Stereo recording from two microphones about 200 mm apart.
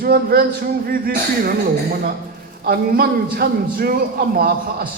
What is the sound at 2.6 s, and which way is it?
A man's voice, 50° right (ahead or behind).